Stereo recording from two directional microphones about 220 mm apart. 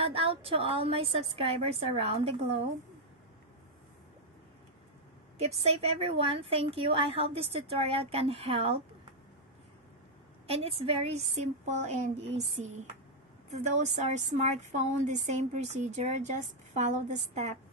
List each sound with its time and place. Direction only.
0.0 s a woman's voice: 25° right (ahead or behind)
5.4 s a woman's voice: 30° right (ahead or behind)
10.4 s a woman's voice: 25° right (ahead or behind)
12.6 s speech: 75° right (ahead or behind)
13.5 s a woman's voice: 30° right (ahead or behind)